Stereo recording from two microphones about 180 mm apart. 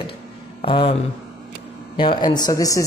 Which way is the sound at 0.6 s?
30° left (ahead or behind).